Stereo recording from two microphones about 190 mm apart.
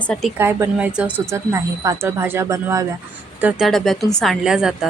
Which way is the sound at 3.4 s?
5° right (ahead or behind).